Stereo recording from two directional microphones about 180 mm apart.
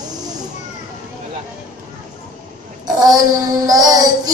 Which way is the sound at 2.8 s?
20° right (ahead or behind).